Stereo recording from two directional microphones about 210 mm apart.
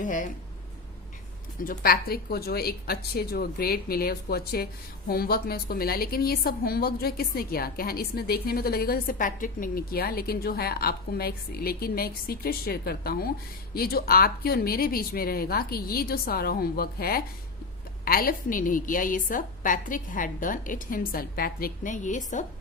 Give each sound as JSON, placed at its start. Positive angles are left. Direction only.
{"t": 0.0, "sound": "a woman's voice", "side_deg": 40}
{"t": 1.6, "sound": "a woman's voice", "side_deg": 45}